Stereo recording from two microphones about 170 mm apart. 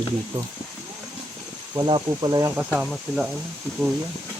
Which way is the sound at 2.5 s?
5° right (ahead or behind).